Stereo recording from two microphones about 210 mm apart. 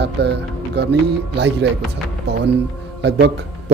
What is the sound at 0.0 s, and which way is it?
Speech, 55° right (ahead or behind).